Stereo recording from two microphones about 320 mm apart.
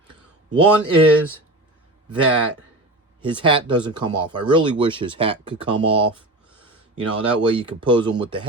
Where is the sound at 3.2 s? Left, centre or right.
Centre.